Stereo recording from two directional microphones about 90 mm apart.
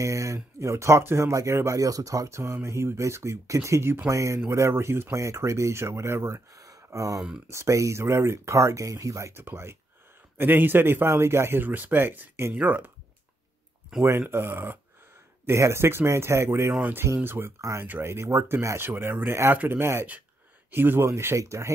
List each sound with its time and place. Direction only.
0.0 s speech: 35° right (ahead or behind); by 12.9 s 20° right (ahead or behind)
14.2 s speech: 25° right (ahead or behind)